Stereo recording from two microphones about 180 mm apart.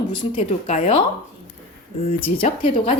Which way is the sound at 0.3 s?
40° left (ahead or behind).